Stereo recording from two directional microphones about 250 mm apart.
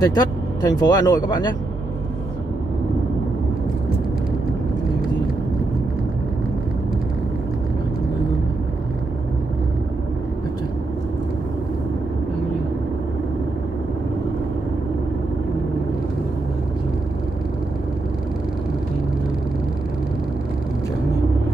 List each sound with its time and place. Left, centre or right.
0.0 s speech: centre